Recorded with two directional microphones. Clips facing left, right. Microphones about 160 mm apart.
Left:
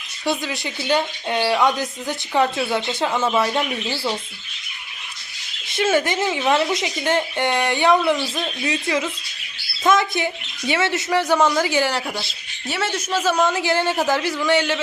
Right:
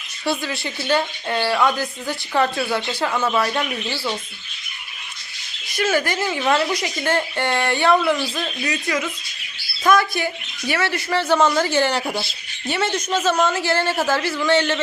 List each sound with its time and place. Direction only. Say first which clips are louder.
0.3 s a woman's voice: even; 15° left (ahead or behind)
5.6 s a woman's voice: left 2 dB; 25° left (ahead or behind)